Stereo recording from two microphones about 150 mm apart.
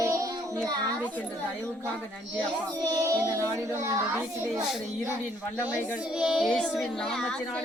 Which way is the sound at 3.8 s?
15° right (ahead or behind).